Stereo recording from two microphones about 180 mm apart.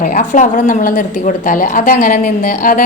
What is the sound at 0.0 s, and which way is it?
Speech, 45° left (ahead or behind).